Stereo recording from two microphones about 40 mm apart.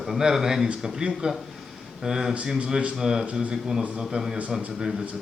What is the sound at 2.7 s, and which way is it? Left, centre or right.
A man's voice, right.